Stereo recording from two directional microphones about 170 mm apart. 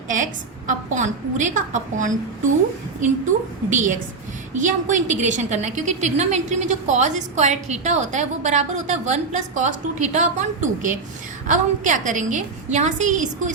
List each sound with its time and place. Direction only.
0.7 s a woman's voice: 45° right (ahead or behind)